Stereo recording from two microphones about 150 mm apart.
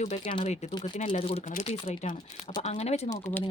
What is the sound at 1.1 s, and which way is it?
Speech, 40° left (ahead or behind).